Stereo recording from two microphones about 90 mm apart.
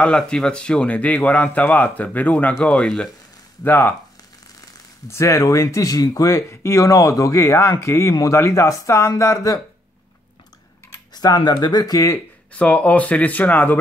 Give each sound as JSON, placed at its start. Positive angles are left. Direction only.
{"t": 0.0, "sound": "a man's voice", "side_deg": 10}
{"t": 3.6, "sound": "speech", "side_deg": 20}
{"t": 5.1, "sound": "speech", "side_deg": 35}
{"t": 11.1, "sound": "speech", "side_deg": 50}
{"t": 12.5, "sound": "a man's voice", "side_deg": 15}